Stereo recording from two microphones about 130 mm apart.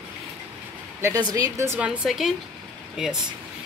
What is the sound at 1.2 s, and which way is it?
Speech, 25° right (ahead or behind).